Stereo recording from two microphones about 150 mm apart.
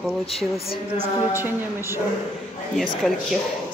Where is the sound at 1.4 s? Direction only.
15° right (ahead or behind).